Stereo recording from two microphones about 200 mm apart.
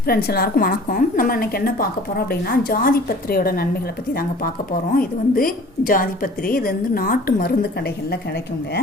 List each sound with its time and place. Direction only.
0.1 s a woman's voice: 50° left (ahead or behind)